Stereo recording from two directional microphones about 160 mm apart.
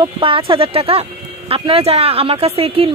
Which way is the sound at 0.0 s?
35° right (ahead or behind).